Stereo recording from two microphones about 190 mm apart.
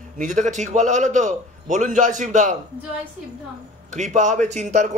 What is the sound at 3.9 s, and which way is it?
Speech, 40° right (ahead or behind).